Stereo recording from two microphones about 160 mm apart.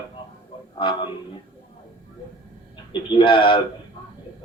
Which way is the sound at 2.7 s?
30° left (ahead or behind).